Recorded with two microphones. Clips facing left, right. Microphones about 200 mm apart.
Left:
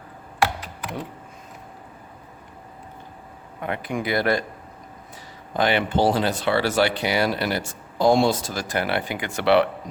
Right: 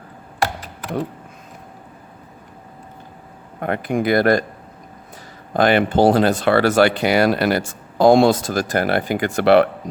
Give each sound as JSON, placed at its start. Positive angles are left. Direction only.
{"t": 3.6, "sound": "speech", "side_deg": -50}
{"t": 5.5, "sound": "speech", "side_deg": -45}